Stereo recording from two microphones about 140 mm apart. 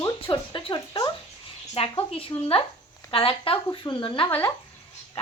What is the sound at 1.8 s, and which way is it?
A woman's voice, 45° left (ahead or behind).